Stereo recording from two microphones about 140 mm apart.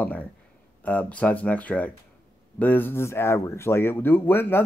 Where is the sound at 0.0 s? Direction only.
10° left (ahead or behind).